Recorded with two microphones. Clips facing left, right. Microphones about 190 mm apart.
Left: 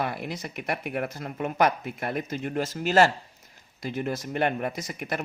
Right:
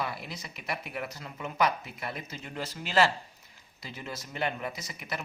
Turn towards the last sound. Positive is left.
turn(degrees=50)  # may be behind; listen again after turning